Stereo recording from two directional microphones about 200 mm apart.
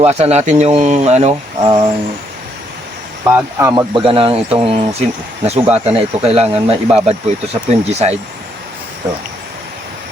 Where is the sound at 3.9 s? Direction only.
25° right (ahead or behind).